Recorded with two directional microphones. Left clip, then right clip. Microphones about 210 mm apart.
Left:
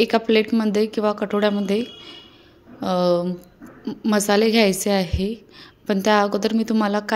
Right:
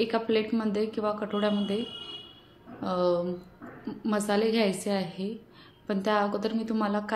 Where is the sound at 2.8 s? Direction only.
45° left (ahead or behind).